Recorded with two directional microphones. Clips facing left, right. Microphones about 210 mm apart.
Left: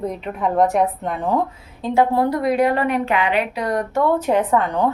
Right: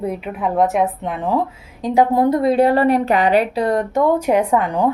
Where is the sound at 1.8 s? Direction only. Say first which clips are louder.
Right 2 dB; 15° right (ahead or behind).